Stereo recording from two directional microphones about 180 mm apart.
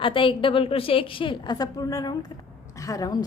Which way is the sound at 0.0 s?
30° left (ahead or behind).